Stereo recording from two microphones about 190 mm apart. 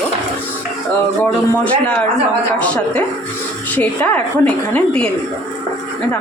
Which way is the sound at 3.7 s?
10° left (ahead or behind).